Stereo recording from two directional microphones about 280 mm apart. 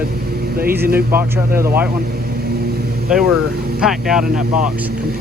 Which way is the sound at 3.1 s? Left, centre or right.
Centre.